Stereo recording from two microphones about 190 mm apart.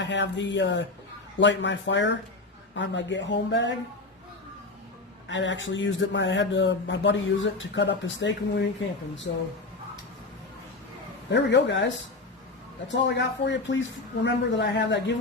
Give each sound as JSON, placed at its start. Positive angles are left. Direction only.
{"t": 0.0, "sound": "speech", "side_deg": 70}
{"t": 5.3, "sound": "speech", "side_deg": 75}
{"t": 11.3, "sound": "speech", "side_deg": 65}